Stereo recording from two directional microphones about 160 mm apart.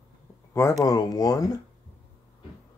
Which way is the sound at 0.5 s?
20° left (ahead or behind).